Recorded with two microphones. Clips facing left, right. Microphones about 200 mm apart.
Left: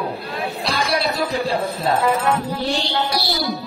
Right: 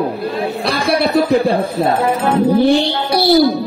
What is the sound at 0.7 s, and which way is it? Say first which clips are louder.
Music: right 7 dB; 55° right (ahead or behind).